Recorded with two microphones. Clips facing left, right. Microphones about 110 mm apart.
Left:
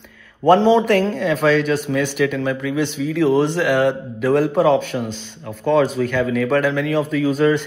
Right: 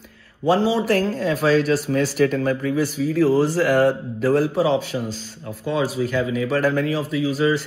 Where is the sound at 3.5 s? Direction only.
40° right (ahead or behind).